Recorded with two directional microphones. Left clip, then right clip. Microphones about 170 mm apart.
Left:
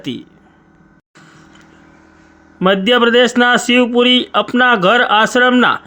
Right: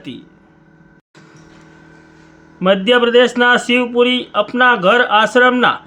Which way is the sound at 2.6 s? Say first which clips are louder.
Left 1 dB; 35° left (ahead or behind).